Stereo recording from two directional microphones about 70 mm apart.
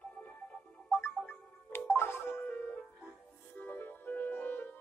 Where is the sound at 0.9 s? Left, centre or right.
Left.